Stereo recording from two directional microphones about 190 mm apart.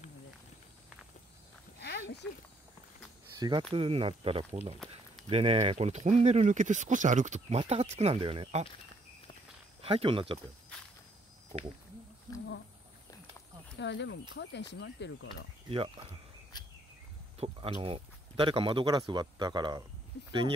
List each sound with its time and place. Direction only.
1.8 s a sound: 60° left (ahead or behind)
3.3 s speech: 20° right (ahead or behind)
9.8 s speech: 30° right (ahead or behind)
13.7 s speech: 70° left (ahead or behind)
15.7 s speech: 30° right (ahead or behind)
17.4 s speech: 30° right (ahead or behind)